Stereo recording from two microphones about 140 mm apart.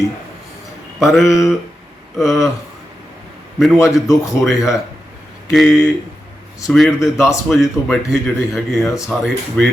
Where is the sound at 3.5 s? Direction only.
Centre (ahead or behind).